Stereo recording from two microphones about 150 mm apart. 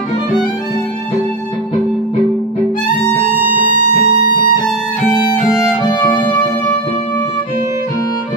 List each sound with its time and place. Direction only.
4.0 s music: 75° left (ahead or behind)
4.6 s music: centre (ahead or behind)